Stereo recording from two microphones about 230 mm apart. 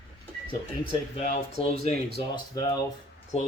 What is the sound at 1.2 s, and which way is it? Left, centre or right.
Speech, left.